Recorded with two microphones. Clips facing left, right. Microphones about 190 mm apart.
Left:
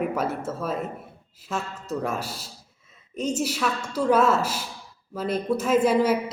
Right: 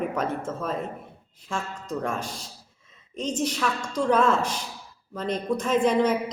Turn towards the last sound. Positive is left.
turn(degrees=5)  # may be behind; listen again after turning